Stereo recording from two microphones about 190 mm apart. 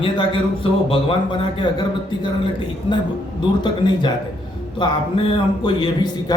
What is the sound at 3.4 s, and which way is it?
Speech, 25° left (ahead or behind).